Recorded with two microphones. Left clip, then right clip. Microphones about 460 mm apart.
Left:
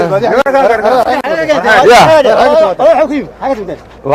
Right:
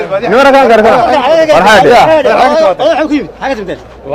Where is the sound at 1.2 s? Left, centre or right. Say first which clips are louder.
Right 5 dB; left.